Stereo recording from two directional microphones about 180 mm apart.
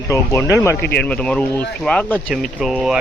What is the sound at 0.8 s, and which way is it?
Speech, 60° left (ahead or behind).